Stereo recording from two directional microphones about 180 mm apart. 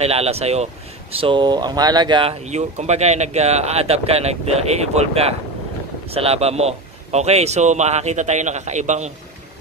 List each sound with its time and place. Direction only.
0.0 s a man's voice: 35° right (ahead or behind)
2.4 s a man's voice: 40° right (ahead or behind)